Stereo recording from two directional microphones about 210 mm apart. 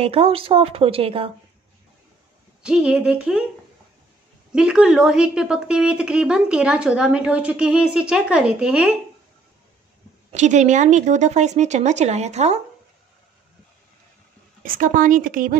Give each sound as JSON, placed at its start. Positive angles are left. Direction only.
{"t": 0.0, "sound": "speech", "side_deg": -30}
{"t": 2.6, "sound": "a woman's voice", "side_deg": -5}
{"t": 4.5, "sound": "a woman's voice", "side_deg": -5}
{"t": 10.3, "sound": "speech", "side_deg": -35}
{"t": 14.6, "sound": "speech", "side_deg": -40}